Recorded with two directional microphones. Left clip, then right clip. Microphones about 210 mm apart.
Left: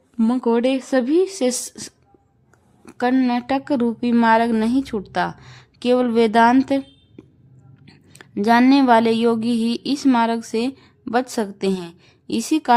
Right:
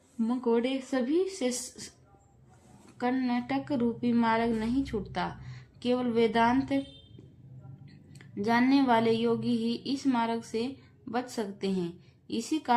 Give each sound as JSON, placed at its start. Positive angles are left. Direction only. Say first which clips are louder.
{"t": 0.2, "sound": "speech", "louder": "left 9 dB", "side_deg": 55}
{"t": 7.9, "sound": "speech", "louder": "left 9 dB", "side_deg": 60}